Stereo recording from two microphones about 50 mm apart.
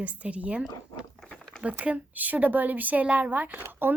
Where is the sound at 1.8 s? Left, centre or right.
Right.